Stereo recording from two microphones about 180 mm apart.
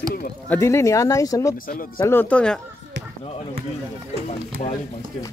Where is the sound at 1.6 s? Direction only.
55° left (ahead or behind).